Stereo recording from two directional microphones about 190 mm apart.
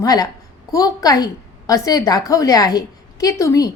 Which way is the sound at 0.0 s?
20° left (ahead or behind).